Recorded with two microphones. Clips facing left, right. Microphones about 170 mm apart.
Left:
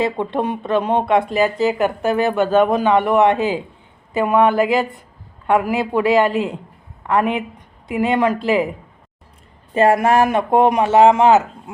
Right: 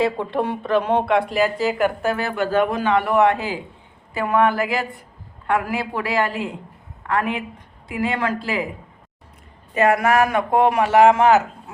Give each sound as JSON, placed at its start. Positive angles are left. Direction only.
{"t": 0.0, "sound": "speech", "side_deg": 20}
{"t": 9.7, "sound": "speech", "side_deg": 30}